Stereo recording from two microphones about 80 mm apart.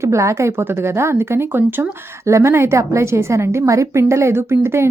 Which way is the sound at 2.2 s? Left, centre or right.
Right.